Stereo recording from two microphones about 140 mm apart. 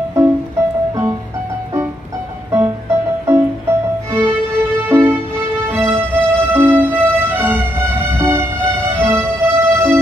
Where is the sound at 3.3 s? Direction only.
15° right (ahead or behind).